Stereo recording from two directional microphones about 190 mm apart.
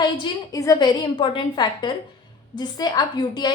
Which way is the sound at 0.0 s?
20° left (ahead or behind).